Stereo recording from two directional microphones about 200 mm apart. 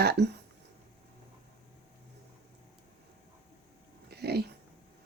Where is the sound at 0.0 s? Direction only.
55° right (ahead or behind).